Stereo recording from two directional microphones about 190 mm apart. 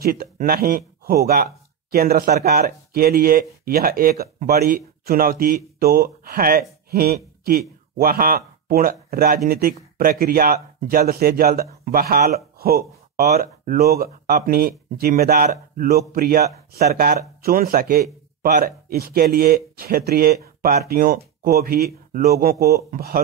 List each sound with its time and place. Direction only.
0.0 s speech: 50° right (ahead or behind)